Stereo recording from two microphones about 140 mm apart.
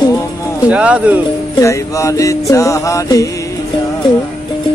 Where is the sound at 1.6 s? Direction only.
20° left (ahead or behind).